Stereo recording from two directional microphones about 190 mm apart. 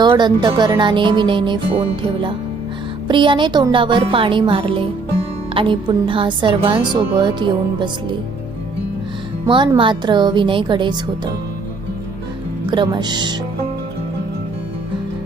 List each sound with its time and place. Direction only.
0.0 s speech: 25° right (ahead or behind)
9.5 s speech: 25° right (ahead or behind)
12.7 s speech: 25° right (ahead or behind)